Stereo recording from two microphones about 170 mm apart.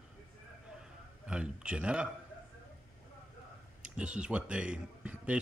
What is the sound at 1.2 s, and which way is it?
Speech, 5° right (ahead or behind).